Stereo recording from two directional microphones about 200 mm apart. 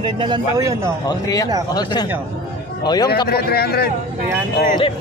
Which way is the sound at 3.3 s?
50° left (ahead or behind).